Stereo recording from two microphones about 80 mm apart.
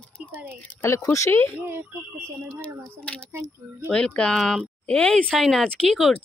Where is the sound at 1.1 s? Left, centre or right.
Left.